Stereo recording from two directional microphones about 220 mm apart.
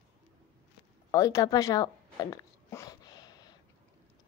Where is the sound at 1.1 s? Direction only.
15° left (ahead or behind).